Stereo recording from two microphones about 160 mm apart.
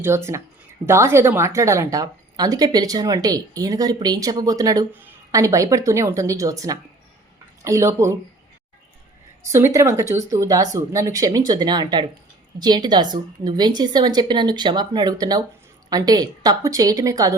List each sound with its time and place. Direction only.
0.0 s a woman's voice: 15° right (ahead or behind)
9.5 s a woman's voice: 15° right (ahead or behind)